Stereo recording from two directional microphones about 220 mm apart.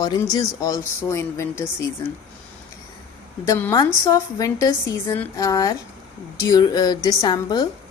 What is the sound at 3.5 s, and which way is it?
Speech, 10° left (ahead or behind).